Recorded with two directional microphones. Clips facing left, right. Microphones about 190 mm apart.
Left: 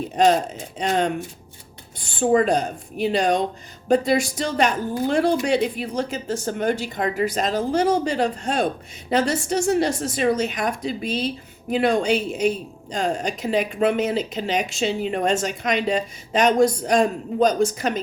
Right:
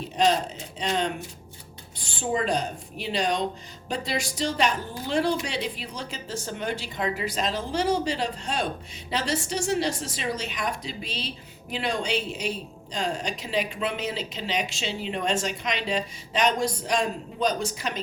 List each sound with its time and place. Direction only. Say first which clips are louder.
0.2 s speech: left 5 dB; 50° left (ahead or behind)